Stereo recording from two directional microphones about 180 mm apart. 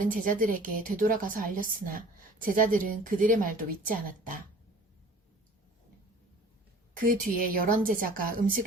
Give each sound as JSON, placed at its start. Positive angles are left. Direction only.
{"t": 0.0, "sound": "a woman's voice", "side_deg": -50}
{"t": 6.9, "sound": "a woman's voice", "side_deg": -50}